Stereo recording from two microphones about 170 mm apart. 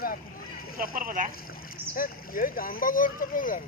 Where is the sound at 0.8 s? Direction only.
55° right (ahead or behind).